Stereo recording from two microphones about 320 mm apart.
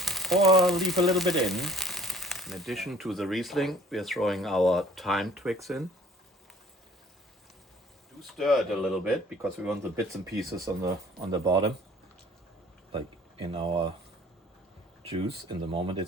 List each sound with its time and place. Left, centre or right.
0.0 s speech: centre
8.2 s speech: centre
13.4 s speech: centre
15.0 s speech: centre